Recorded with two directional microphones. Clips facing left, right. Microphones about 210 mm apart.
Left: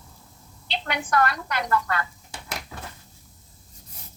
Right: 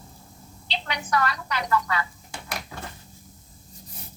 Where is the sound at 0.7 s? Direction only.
55° left (ahead or behind).